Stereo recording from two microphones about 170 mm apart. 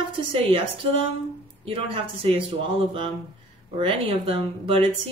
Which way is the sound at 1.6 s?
35° right (ahead or behind).